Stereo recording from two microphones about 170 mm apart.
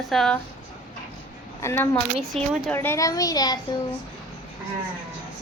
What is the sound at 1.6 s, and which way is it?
A woman's voice, 15° left (ahead or behind).